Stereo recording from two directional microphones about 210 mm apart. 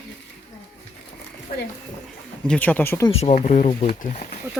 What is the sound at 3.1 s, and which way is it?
Speech, 30° left (ahead or behind).